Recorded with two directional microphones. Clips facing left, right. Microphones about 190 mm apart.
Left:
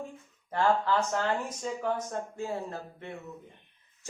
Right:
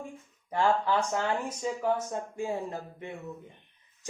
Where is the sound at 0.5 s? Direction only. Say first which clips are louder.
Even; 15° right (ahead or behind).